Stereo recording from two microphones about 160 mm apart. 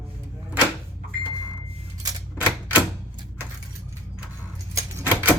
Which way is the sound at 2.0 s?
25° right (ahead or behind).